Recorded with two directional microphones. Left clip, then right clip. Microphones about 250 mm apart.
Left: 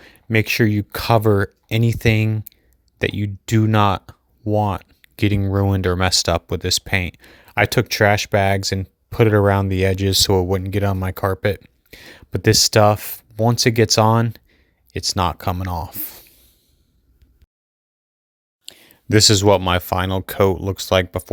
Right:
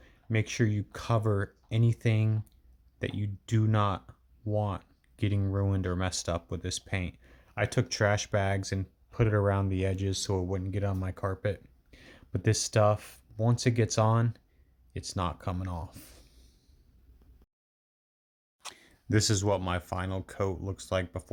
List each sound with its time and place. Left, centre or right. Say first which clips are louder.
0.0 s speech: left 14 dB; left
18.7 s speech: left 13 dB; left